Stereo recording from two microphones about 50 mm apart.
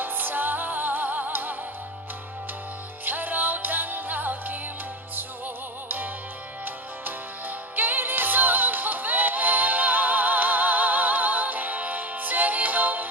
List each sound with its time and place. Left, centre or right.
0.0 s music: right
3.0 s music: right
6.7 s music: right